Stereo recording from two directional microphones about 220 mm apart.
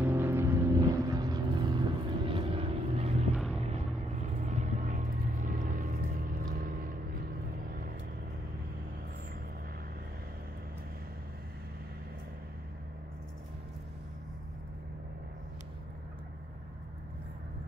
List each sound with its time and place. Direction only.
0.0 s vehicle: 10° right (ahead or behind); by 3.3 s 30° right (ahead or behind)
3.3 s vehicle: centre (ahead or behind)
3.6 s vehicle: 30° right (ahead or behind)